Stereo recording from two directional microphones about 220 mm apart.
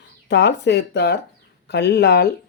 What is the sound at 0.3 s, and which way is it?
Speech, 50° left (ahead or behind).